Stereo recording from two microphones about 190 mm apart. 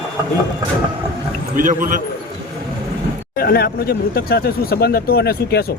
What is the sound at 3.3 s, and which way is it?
Speech, 55° left (ahead or behind).